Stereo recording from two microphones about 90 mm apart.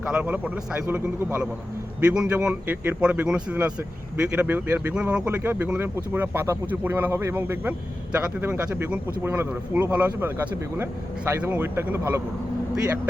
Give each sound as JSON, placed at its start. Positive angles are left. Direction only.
{"t": 0.0, "sound": "a man's voice", "side_deg": -15}
{"t": 4.9, "sound": "a man's voice", "side_deg": -15}